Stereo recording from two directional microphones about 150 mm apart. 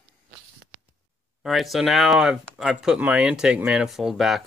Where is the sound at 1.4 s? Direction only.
Centre (ahead or behind).